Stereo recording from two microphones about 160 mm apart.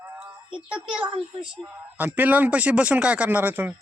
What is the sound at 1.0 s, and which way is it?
Speech, 30° right (ahead or behind).